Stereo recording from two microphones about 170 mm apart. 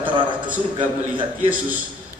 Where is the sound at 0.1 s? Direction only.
30° right (ahead or behind).